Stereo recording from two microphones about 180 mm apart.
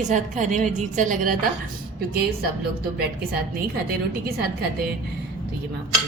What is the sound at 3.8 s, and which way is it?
A woman's voice, 55° right (ahead or behind).